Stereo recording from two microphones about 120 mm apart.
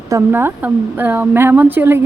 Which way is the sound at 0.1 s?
20° right (ahead or behind).